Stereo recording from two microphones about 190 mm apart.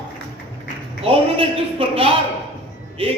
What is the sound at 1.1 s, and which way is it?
A man's voice, 30° right (ahead or behind).